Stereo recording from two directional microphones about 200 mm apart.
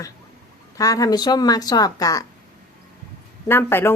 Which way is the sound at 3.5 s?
10° left (ahead or behind).